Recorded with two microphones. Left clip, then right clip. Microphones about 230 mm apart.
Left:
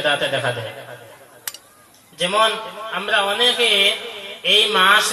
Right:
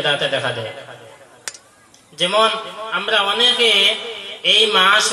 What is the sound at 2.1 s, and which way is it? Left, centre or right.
A man's voice, right.